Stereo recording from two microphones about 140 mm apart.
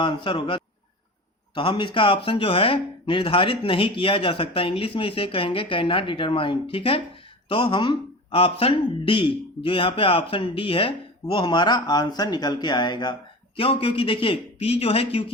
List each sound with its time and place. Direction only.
0.0 s speech: 35° left (ahead or behind)